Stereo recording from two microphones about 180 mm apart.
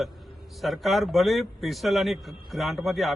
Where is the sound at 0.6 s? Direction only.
Centre (ahead or behind).